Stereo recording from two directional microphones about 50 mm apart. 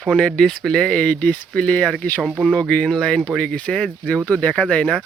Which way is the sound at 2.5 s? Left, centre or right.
Centre.